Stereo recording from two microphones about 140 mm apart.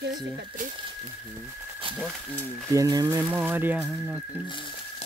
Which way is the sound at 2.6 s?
25° right (ahead or behind).